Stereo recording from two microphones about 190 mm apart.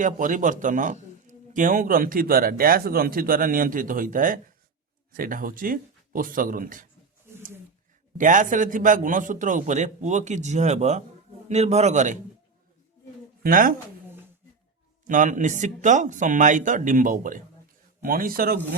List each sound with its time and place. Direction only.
0.0 s a man's voice: 45° right (ahead or behind)
8.2 s a man's voice: 45° right (ahead or behind)
13.4 s a man's voice: 45° right (ahead or behind)
15.0 s a man's voice: 40° right (ahead or behind)